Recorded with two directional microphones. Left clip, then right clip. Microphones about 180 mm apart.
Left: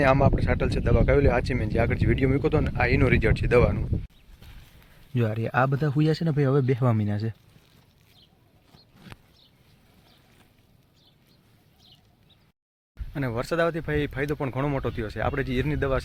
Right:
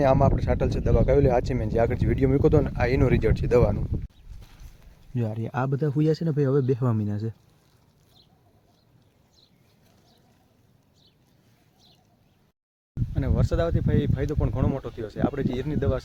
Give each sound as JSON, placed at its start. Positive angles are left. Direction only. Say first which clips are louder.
{"t": 0.0, "sound": "speech", "louder": "even", "side_deg": -5}
{"t": 5.1, "sound": "speech", "louder": "left 5 dB", "side_deg": 10}
{"t": 13.1, "sound": "speech", "louder": "left 2 dB", "side_deg": 0}